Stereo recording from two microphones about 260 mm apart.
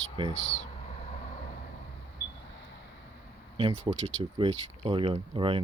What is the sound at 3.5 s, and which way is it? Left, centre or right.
Speech, right.